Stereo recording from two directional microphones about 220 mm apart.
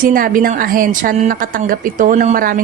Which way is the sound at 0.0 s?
40° right (ahead or behind).